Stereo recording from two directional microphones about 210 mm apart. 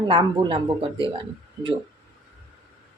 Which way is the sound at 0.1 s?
20° right (ahead or behind).